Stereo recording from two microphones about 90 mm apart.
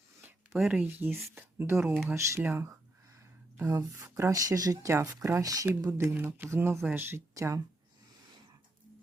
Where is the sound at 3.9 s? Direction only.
30° right (ahead or behind).